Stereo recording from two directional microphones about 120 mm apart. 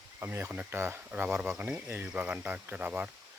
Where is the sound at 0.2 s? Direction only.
20° right (ahead or behind).